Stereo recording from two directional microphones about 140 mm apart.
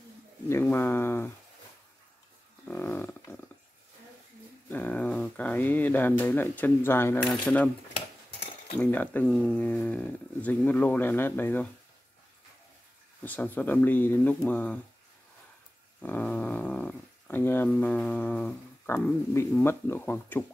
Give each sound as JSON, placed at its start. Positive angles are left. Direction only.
{"t": 0.5, "sound": "speech", "side_deg": 15}
{"t": 2.7, "sound": "livestock", "side_deg": 15}
{"t": 4.6, "sound": "speech", "side_deg": 10}
{"t": 8.7, "sound": "speech", "side_deg": 10}
{"t": 13.2, "sound": "speech", "side_deg": 10}
{"t": 16.0, "sound": "speech", "side_deg": 10}